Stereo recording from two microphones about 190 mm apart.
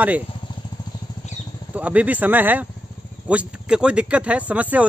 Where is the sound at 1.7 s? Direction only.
5° right (ahead or behind).